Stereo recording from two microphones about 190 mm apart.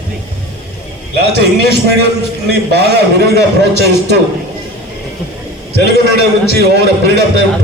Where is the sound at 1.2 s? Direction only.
60° right (ahead or behind).